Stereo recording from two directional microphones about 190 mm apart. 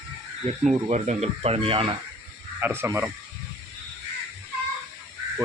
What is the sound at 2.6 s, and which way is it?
Speech, 10° right (ahead or behind).